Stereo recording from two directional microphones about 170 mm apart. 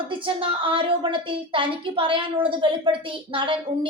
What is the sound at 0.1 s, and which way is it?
A woman's voice, 30° right (ahead or behind).